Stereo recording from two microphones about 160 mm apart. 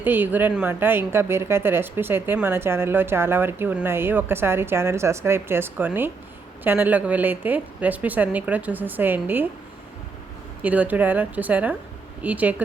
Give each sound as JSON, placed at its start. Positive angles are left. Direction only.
{"t": 0.0, "sound": "a woman's voice", "side_deg": -10}
{"t": 10.6, "sound": "a woman's voice", "side_deg": -10}